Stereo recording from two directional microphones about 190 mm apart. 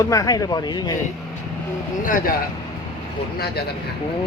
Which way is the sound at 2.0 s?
45° left (ahead or behind).